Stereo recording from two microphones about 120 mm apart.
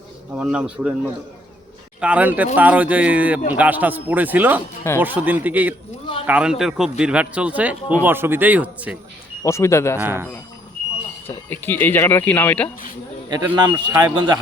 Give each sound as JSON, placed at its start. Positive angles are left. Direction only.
{"t": 0.3, "sound": "a man's voice", "side_deg": -5}
{"t": 2.0, "sound": "a man's voice", "side_deg": -10}
{"t": 9.4, "sound": "speech", "side_deg": 25}
{"t": 10.0, "sound": "a man's voice", "side_deg": -20}
{"t": 11.3, "sound": "speech", "side_deg": 15}
{"t": 13.3, "sound": "a man's voice", "side_deg": -35}